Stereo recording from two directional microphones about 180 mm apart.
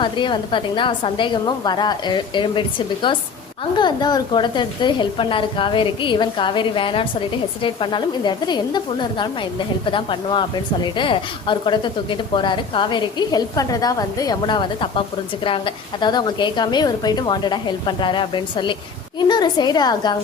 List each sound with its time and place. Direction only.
0.0 s speech: 25° left (ahead or behind)